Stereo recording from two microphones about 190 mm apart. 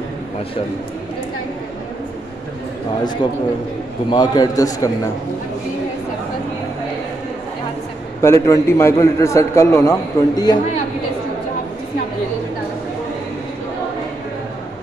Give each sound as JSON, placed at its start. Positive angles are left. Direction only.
{"t": 4.1, "sound": "a man's voice", "side_deg": 20}
{"t": 8.2, "sound": "a man's voice", "side_deg": 15}